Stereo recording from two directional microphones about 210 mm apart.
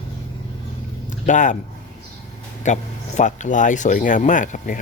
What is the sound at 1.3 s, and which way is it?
Speech, 35° left (ahead or behind).